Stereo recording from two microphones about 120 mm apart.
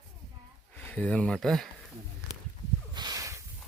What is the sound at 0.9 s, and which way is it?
Speech, 10° left (ahead or behind).